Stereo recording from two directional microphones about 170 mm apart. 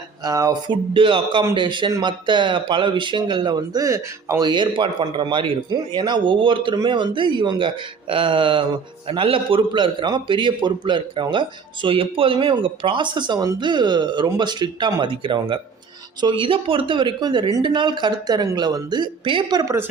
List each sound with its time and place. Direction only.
0.2 s speech: 20° right (ahead or behind)